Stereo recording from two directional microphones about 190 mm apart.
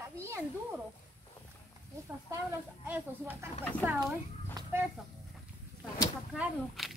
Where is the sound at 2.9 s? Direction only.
10° right (ahead or behind).